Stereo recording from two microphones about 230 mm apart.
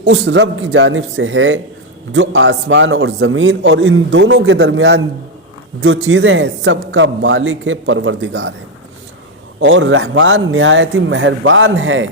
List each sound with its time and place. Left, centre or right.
0.1 s a man's voice: right
9.6 s a man's voice: right